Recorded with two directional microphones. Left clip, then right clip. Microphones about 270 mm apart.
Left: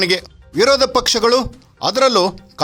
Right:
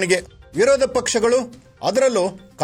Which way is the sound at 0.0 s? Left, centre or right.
Centre.